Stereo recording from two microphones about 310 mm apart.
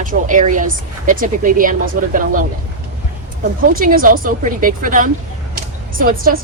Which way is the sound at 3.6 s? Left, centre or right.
Right.